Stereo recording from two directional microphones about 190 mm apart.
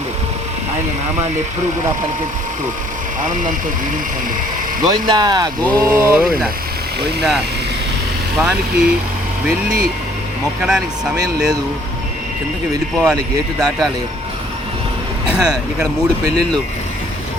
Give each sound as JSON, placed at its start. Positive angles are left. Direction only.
{"t": 4.9, "sound": "speech", "side_deg": -20}
{"t": 10.6, "sound": "speech", "side_deg": -5}
{"t": 12.7, "sound": "speech", "side_deg": -20}
{"t": 13.1, "sound": "speech", "side_deg": 0}
{"t": 15.3, "sound": "speech", "side_deg": -5}